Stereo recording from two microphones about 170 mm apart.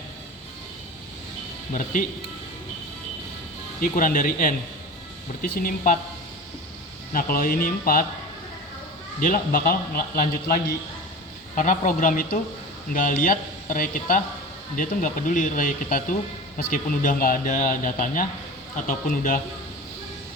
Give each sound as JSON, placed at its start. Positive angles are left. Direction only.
{"t": 1.7, "sound": "speech", "side_deg": 50}
{"t": 3.8, "sound": "speech", "side_deg": 55}
{"t": 7.1, "sound": "speech", "side_deg": 55}
{"t": 9.2, "sound": "speech", "side_deg": 55}